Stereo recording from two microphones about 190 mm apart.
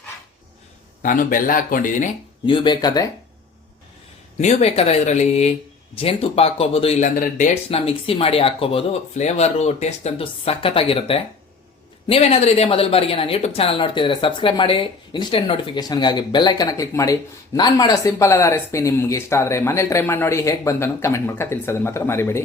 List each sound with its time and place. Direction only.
1.0 s speech: 45° left (ahead or behind)
2.5 s a woman's voice: 25° left (ahead or behind)
4.4 s a woman's voice: 35° left (ahead or behind); by 22.4 s 15° left (ahead or behind)